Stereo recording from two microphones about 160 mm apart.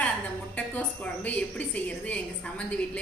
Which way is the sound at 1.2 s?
10° left (ahead or behind).